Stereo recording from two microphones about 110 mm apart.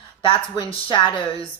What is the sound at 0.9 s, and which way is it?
Speech, 45° left (ahead or behind).